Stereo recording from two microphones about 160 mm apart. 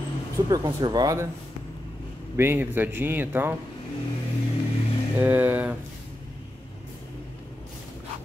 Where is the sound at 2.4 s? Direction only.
15° right (ahead or behind).